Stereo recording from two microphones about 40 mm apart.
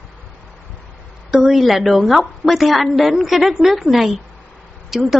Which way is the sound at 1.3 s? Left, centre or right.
Centre.